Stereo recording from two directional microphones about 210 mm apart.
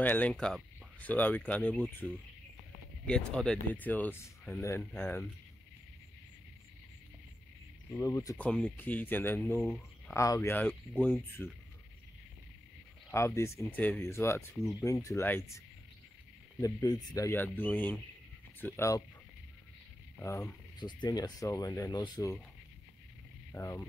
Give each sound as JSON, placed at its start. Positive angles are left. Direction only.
{"t": 0.0, "sound": "speech", "side_deg": 10}
{"t": 8.0, "sound": "speech", "side_deg": 15}
{"t": 13.1, "sound": "speech", "side_deg": 15}
{"t": 14.6, "sound": "speech", "side_deg": 0}
{"t": 14.9, "sound": "speech", "side_deg": 15}
{"t": 16.6, "sound": "speech", "side_deg": 15}
{"t": 20.2, "sound": "speech", "side_deg": 10}
{"t": 23.5, "sound": "speech", "side_deg": 10}